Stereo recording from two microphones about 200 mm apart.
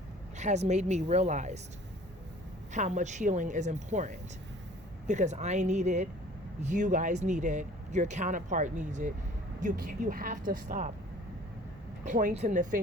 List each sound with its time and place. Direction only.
0.3 s speech: 35° right (ahead or behind)
2.7 s speech: 35° right (ahead or behind)
12.0 s speech: 40° right (ahead or behind)